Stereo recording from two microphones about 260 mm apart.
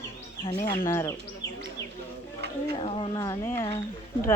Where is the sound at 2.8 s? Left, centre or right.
Left.